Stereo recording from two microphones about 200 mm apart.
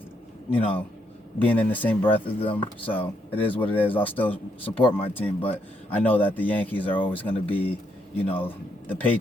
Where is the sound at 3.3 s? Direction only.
10° left (ahead or behind).